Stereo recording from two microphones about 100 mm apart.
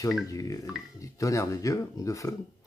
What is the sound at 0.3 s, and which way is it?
Speech, 35° left (ahead or behind).